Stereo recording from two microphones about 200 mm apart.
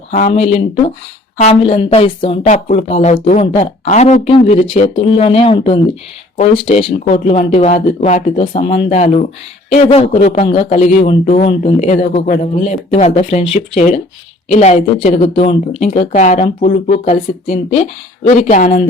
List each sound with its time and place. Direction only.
0.1 s speech: 35° left (ahead or behind)
14.5 s speech: 35° left (ahead or behind)